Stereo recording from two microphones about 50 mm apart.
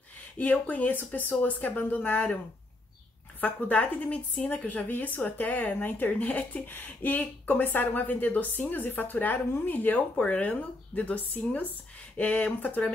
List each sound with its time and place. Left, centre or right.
0.4 s speech: left
0.9 s speech: left
1.4 s speech: left
3.3 s a woman's voice: left